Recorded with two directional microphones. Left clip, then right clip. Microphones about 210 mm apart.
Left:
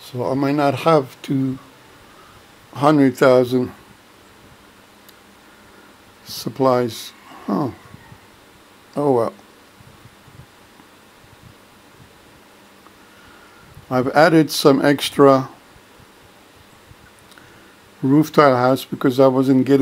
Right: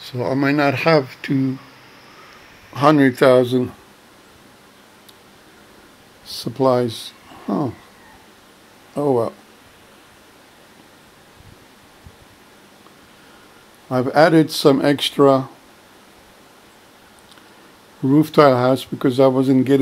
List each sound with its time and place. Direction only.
0.0 s speech: centre (ahead or behind)
2.7 s speech: 5° left (ahead or behind)
6.2 s speech: centre (ahead or behind)
8.9 s speech: 5° left (ahead or behind)
13.8 s speech: 5° left (ahead or behind)
18.0 s speech: centre (ahead or behind)